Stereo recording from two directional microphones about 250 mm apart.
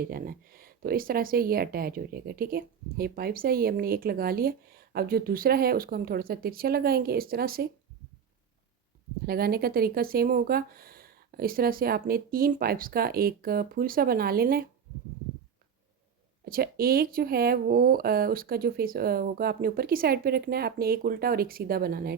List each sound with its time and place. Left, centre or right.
0.0 s speech: right
9.2 s speech: right
16.5 s speech: right